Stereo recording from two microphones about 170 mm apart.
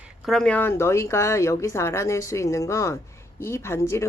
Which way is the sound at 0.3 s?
5° left (ahead or behind).